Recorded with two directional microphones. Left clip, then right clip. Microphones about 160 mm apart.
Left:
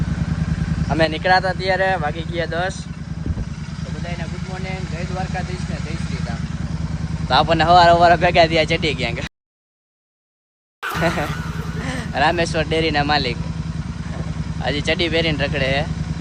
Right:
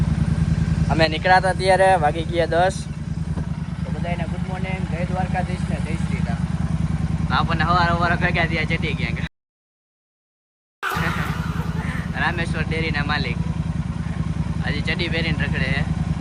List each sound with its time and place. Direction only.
0.9 s speech: 10° left (ahead or behind)
4.0 s vehicle: centre (ahead or behind)
7.3 s speech: 20° left (ahead or behind)
11.9 s speech: 20° left (ahead or behind)
14.6 s speech: 15° left (ahead or behind)